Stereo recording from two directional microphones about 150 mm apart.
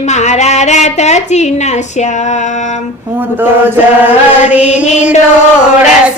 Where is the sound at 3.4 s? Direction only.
15° right (ahead or behind).